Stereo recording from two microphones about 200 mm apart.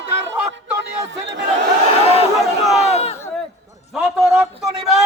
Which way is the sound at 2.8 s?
30° left (ahead or behind).